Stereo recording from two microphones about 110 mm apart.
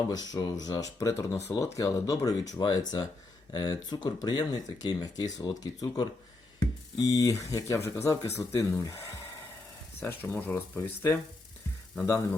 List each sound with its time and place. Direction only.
0.1 s speech: 35° left (ahead or behind)
10.0 s speech: 20° left (ahead or behind)